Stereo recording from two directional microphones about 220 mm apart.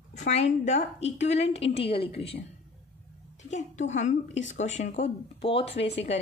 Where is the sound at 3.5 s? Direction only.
35° left (ahead or behind).